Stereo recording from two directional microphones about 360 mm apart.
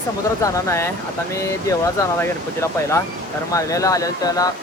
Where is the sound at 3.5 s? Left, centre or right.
Centre.